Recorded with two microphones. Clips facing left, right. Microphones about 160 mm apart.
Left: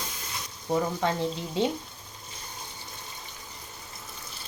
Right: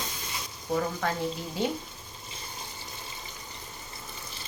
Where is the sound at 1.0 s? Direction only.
25° left (ahead or behind).